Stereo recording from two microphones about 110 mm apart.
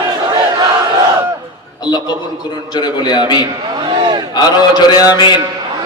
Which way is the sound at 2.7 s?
40° left (ahead or behind).